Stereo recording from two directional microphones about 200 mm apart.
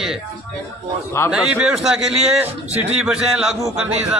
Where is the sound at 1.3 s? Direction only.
5° right (ahead or behind).